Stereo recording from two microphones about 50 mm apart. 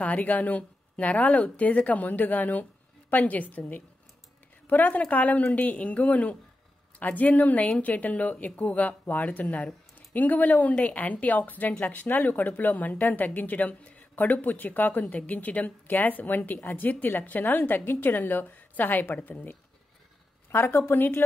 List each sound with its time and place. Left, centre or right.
0.0 s speech: left
20.5 s a woman's voice: left